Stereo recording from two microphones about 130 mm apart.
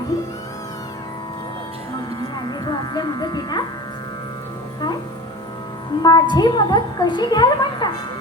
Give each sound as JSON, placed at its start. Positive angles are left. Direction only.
{"t": 0.1, "sound": "music", "side_deg": 25}
{"t": 2.4, "sound": "music", "side_deg": 35}
{"t": 6.0, "sound": "a woman's voice", "side_deg": 35}